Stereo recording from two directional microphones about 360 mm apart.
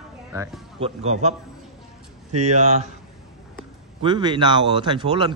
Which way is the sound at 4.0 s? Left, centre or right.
Centre.